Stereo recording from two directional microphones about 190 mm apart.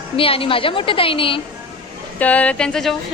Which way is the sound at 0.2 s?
30° left (ahead or behind).